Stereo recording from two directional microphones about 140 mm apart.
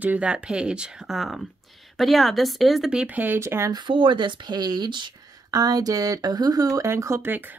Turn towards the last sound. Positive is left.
turn(degrees=-15)  # may be behind; listen again after turning